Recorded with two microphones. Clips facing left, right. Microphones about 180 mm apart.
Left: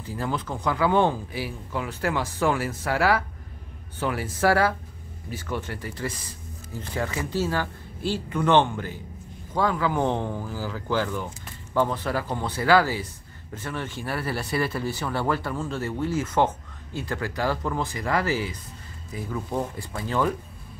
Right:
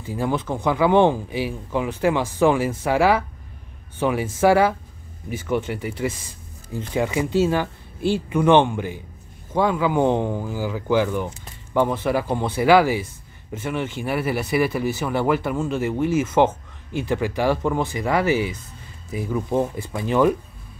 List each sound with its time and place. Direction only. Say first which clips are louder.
0.0 s speech: right 5 dB; 20° right (ahead or behind)